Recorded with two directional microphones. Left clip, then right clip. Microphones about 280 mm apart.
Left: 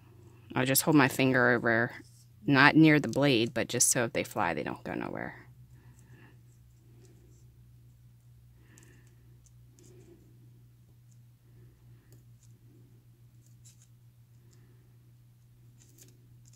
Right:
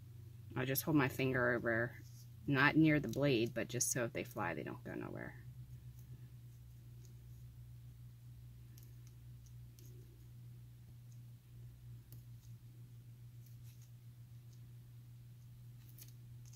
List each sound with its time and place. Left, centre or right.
0.5 s speech: left